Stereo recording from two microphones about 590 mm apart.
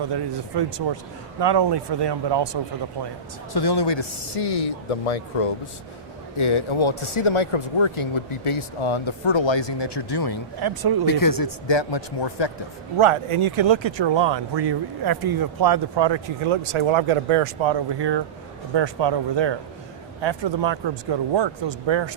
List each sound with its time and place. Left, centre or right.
0.0 s speech: right
3.5 s speech: left
6.3 s speech: left
10.6 s speech: right
11.0 s a man's voice: left
13.0 s speech: right